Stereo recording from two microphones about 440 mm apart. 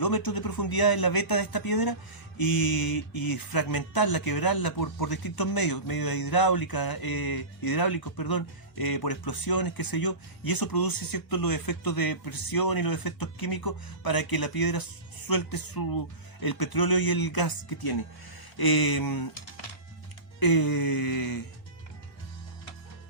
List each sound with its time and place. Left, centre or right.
0.0 s speech: left
20.4 s speech: left